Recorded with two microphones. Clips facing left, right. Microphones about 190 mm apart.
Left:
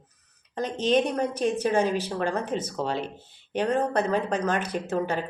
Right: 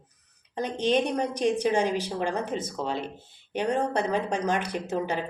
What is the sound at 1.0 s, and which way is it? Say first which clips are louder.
Speech: even; 15° right (ahead or behind).